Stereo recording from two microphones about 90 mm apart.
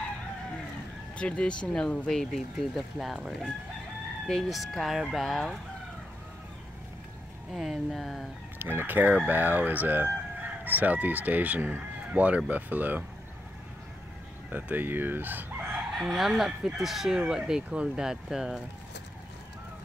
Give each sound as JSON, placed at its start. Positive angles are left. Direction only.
{"t": 1.1, "sound": "speech", "side_deg": 10}
{"t": 7.5, "sound": "speech", "side_deg": -5}
{"t": 8.5, "sound": "speech", "side_deg": -25}
{"t": 14.5, "sound": "speech", "side_deg": -20}
{"t": 16.0, "sound": "speech", "side_deg": -5}